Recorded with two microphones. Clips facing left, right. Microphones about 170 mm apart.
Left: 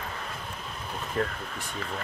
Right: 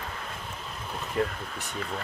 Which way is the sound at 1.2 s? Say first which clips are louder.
Right 1 dB; 15° right (ahead or behind).